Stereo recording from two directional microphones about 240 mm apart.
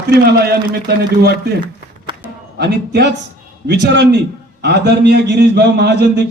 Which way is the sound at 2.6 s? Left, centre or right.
Right.